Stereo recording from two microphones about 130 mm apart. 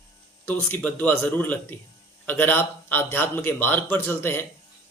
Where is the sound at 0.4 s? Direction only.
15° left (ahead or behind).